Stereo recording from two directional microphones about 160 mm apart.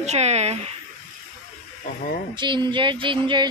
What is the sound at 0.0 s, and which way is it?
Speech, 45° right (ahead or behind).